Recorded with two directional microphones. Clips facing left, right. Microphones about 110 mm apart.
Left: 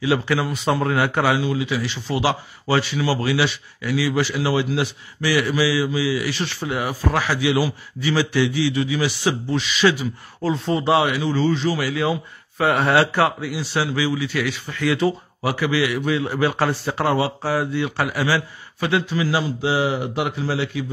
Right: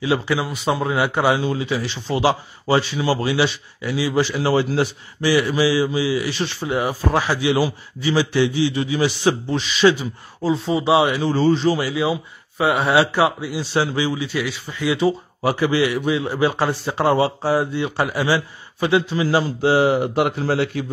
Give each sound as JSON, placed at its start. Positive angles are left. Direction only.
{"t": 0.0, "sound": "a man's voice", "side_deg": -20}
{"t": 5.2, "sound": "a man's voice", "side_deg": -25}
{"t": 10.4, "sound": "speech", "side_deg": -15}
{"t": 11.1, "sound": "a man's voice", "side_deg": -35}
{"t": 19.6, "sound": "speech", "side_deg": -45}